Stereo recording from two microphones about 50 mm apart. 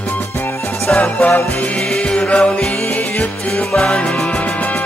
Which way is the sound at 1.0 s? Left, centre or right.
Left.